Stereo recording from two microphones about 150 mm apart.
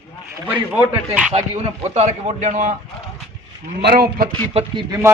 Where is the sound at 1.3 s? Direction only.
45° right (ahead or behind).